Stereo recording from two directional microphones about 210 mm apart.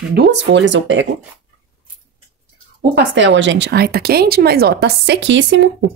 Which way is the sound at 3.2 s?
60° right (ahead or behind).